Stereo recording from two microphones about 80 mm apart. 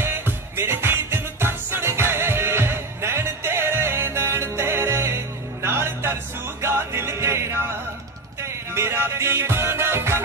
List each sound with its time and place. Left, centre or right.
0.0 s music: right